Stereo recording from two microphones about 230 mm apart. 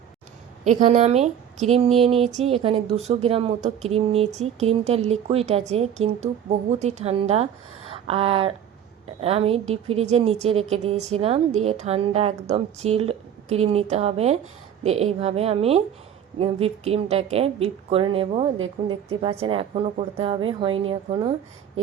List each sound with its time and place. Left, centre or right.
0.6 s a woman's voice: right